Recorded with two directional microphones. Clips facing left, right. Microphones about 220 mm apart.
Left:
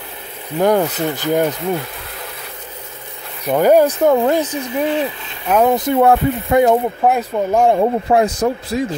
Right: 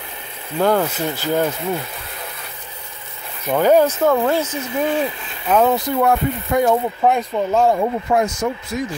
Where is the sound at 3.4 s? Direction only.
10° left (ahead or behind).